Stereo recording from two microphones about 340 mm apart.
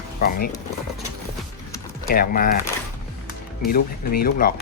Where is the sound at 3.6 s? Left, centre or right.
Left.